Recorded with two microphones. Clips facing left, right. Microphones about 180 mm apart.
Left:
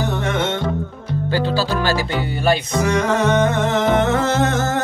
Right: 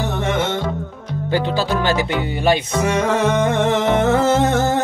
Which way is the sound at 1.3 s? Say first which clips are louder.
Right 1 dB; 20° right (ahead or behind).